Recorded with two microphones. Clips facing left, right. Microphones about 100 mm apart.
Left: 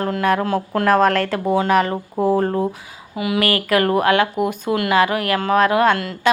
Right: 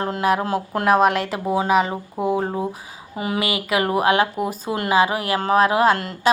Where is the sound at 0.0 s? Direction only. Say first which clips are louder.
Left 2 dB; 25° right (ahead or behind); by 2.6 s 5° right (ahead or behind).